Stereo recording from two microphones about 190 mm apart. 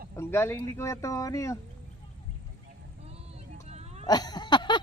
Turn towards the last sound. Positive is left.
turn(degrees=25)  # may be behind; listen again after turning